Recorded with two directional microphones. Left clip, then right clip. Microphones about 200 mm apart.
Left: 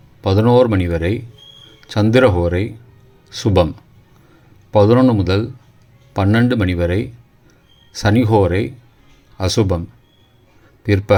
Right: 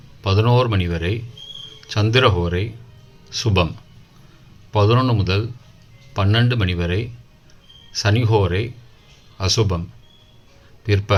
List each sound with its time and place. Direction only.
0.2 s speech: 35° left (ahead or behind)
4.7 s speech: 35° left (ahead or behind)
10.8 s a man's voice: 35° left (ahead or behind)